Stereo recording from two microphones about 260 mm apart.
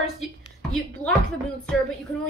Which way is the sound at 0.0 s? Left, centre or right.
Left.